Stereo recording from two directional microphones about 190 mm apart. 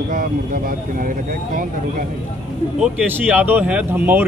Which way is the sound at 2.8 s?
10° right (ahead or behind).